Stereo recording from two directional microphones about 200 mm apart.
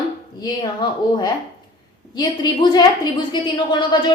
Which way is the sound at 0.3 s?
20° left (ahead or behind).